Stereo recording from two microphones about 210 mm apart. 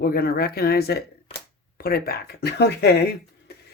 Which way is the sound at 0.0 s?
45° left (ahead or behind).